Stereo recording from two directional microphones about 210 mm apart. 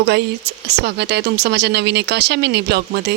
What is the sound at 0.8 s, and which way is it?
Speech, 50° right (ahead or behind).